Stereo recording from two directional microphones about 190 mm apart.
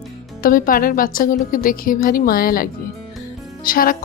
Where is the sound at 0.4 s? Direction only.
45° left (ahead or behind).